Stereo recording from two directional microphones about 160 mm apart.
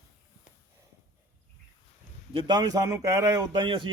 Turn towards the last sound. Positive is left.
turn(degrees=-30)  # may be behind; listen again after turning